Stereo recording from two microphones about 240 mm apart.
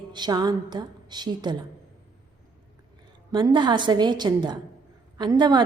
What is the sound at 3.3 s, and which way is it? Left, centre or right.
A woman's voice, centre.